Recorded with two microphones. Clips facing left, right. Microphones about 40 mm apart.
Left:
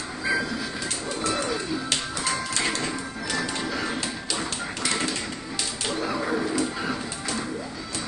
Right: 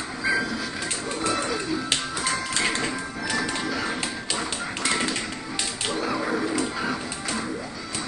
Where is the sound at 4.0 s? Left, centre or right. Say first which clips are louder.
Right 1 dB; right.